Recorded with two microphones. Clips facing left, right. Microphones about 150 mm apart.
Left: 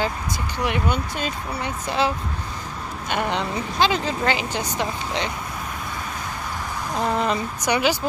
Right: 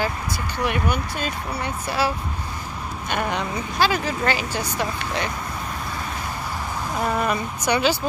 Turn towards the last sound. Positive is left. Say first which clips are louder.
# even
turn(degrees=15)  # may be behind; listen again after turning